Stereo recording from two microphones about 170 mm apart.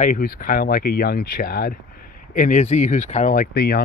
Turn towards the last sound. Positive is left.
turn(degrees=70)  # may be behind; listen again after turning